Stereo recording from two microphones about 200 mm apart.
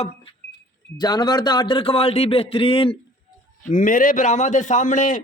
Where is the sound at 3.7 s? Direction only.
40° left (ahead or behind).